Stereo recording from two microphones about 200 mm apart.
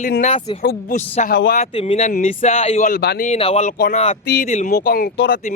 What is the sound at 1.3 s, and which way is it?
Speech, 50° left (ahead or behind).